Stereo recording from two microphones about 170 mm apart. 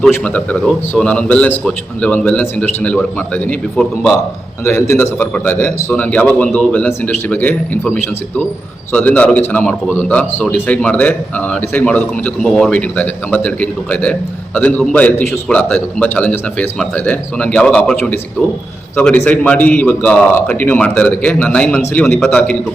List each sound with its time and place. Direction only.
0.0 s a man's voice: 10° left (ahead or behind)